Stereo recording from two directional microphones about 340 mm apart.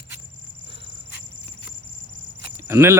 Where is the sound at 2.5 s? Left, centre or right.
Centre.